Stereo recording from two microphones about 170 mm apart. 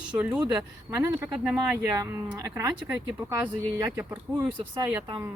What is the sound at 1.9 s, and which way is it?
Speech, 15° right (ahead or behind).